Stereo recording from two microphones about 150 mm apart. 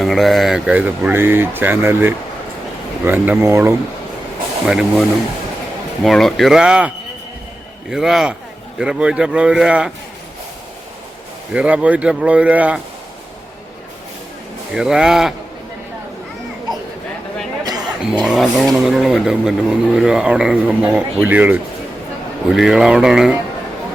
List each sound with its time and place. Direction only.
0.0 s speech: centre (ahead or behind); by 3.8 s 20° right (ahead or behind)
4.6 s speech: 5° right (ahead or behind)
11.5 s speech: 10° right (ahead or behind)
14.7 s speech: 5° right (ahead or behind)
17.6 s chatter: 25° right (ahead or behind)
18.0 s speech: 5° right (ahead or behind)